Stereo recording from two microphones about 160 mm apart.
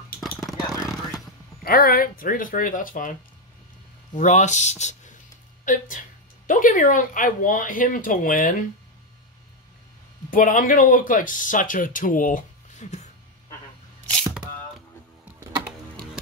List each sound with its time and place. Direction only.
1.6 s speech: 65° left (ahead or behind)
4.1 s speech: 50° left (ahead or behind)
10.3 s speech: 60° left (ahead or behind)
14.0 s camera: centre (ahead or behind)